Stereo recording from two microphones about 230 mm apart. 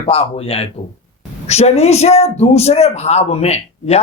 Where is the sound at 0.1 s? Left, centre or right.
Left.